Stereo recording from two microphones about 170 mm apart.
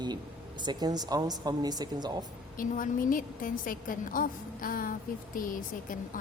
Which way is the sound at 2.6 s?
55° left (ahead or behind).